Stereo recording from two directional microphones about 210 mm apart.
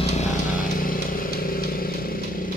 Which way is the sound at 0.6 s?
40° left (ahead or behind).